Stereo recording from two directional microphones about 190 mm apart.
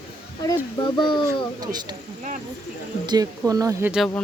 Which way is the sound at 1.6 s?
20° right (ahead or behind).